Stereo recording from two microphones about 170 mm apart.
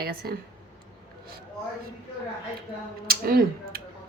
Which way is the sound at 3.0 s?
60° right (ahead or behind).